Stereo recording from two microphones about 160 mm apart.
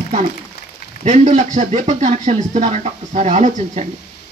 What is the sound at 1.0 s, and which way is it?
Speech, 45° right (ahead or behind).